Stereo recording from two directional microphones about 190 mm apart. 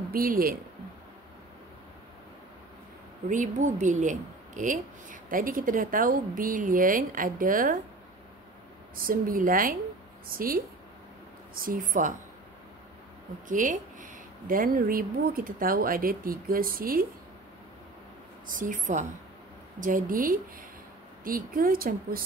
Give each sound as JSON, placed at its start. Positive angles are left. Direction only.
{"t": 0.1, "sound": "speech", "side_deg": -50}
{"t": 3.3, "sound": "speech", "side_deg": -40}
{"t": 8.9, "sound": "speech", "side_deg": -50}
{"t": 13.5, "sound": "speech", "side_deg": -45}
{"t": 18.5, "sound": "speech", "side_deg": -45}